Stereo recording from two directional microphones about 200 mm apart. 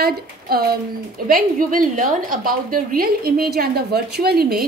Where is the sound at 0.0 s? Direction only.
50° right (ahead or behind).